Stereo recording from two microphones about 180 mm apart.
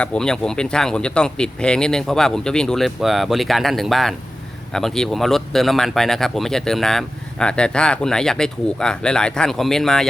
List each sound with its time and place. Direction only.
0.0 s speech: 5° left (ahead or behind)